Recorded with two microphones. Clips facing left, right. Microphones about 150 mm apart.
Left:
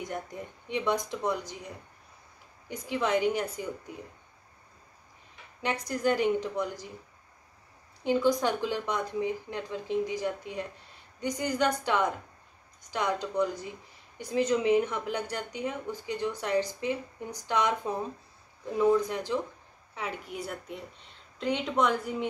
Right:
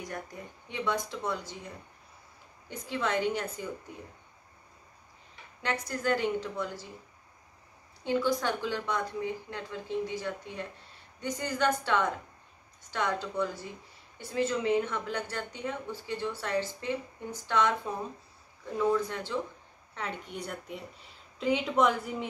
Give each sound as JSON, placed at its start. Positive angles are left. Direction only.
{"t": 0.0, "sound": "speech", "side_deg": 20}
{"t": 2.7, "sound": "a woman's voice", "side_deg": 15}
{"t": 5.6, "sound": "a woman's voice", "side_deg": 15}
{"t": 8.0, "sound": "a woman's voice", "side_deg": 20}
{"t": 18.8, "sound": "a woman's voice", "side_deg": 15}